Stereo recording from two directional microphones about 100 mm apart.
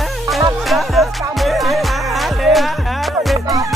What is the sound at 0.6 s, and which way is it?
Music, centre (ahead or behind).